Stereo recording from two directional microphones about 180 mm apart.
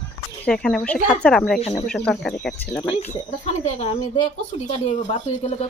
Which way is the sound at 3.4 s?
40° left (ahead or behind).